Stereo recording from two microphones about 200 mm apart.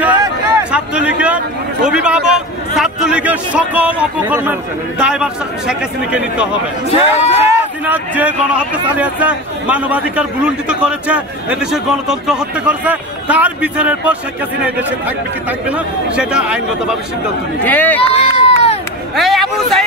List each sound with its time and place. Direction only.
0.0 s speech: 5° right (ahead or behind)
6.9 s speech: 35° left (ahead or behind)
7.4 s speech: 10° right (ahead or behind)
17.6 s speech: 10° left (ahead or behind)
18.0 s run: 30° left (ahead or behind)
19.1 s speech: centre (ahead or behind)